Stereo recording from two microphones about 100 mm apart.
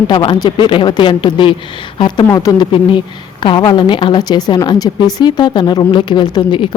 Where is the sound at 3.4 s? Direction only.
50° left (ahead or behind).